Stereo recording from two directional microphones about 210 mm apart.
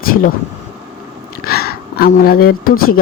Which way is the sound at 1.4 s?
45° left (ahead or behind).